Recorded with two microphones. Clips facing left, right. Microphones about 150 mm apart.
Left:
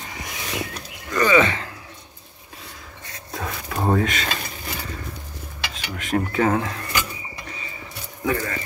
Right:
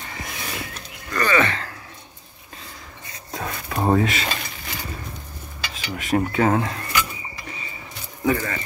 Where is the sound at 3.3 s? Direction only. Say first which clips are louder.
Right 1 dB; centre (ahead or behind).